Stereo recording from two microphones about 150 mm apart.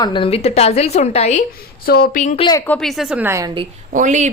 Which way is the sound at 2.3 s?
30° left (ahead or behind).